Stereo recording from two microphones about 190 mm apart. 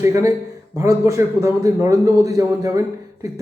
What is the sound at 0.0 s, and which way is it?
A man's voice, 15° right (ahead or behind).